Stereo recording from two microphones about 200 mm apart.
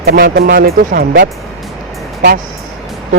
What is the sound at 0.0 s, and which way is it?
Speech, 50° right (ahead or behind).